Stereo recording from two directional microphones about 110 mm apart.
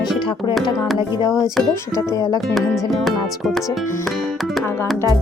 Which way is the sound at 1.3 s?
Centre (ahead or behind).